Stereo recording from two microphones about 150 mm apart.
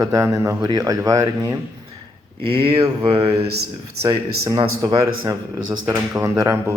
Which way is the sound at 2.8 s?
35° right (ahead or behind).